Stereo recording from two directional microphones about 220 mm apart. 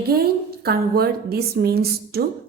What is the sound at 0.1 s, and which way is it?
A woman's voice, 45° right (ahead or behind).